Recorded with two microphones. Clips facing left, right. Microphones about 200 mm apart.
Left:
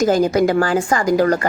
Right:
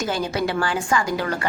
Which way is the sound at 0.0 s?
40° left (ahead or behind).